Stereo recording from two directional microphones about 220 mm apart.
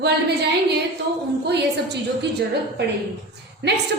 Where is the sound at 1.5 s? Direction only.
50° right (ahead or behind).